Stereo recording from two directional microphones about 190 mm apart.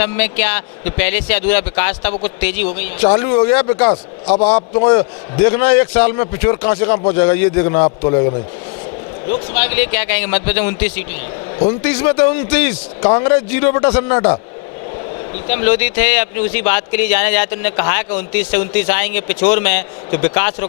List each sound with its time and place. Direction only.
0.0 s speech: 15° left (ahead or behind)
4.5 s a man's voice: 35° left (ahead or behind)
4.9 s a man's voice: 15° left (ahead or behind)
9.5 s speech: 15° left (ahead or behind)
13.0 s a man's voice: 30° left (ahead or behind)
13.2 s speech: 15° left (ahead or behind)
15.4 s speech: 15° left (ahead or behind)